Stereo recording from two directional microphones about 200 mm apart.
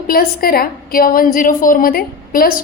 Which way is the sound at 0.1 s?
50° left (ahead or behind).